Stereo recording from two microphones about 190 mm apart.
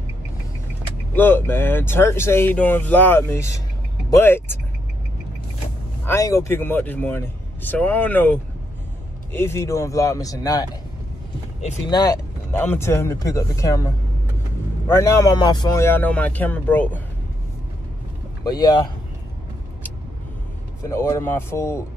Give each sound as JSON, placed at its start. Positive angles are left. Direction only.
{"t": 1.1, "sound": "speech", "side_deg": 10}
{"t": 6.0, "sound": "speech", "side_deg": 15}
{"t": 11.9, "sound": "speech", "side_deg": 20}
{"t": 18.4, "sound": "speech", "side_deg": 20}
{"t": 20.9, "sound": "speech", "side_deg": 15}